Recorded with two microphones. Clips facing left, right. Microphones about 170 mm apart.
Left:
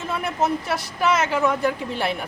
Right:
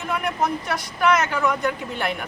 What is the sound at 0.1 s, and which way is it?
A woman's voice, 25° left (ahead or behind).